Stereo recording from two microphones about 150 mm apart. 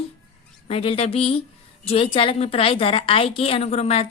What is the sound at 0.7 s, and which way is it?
A woman's voice, 40° left (ahead or behind).